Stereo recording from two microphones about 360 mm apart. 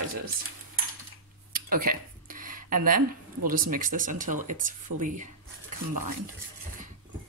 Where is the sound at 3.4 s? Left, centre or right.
Right.